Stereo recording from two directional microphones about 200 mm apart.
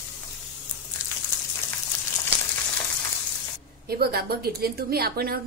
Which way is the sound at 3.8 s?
50° right (ahead or behind).